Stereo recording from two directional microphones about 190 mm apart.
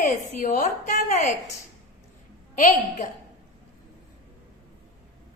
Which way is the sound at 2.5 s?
45° left (ahead or behind).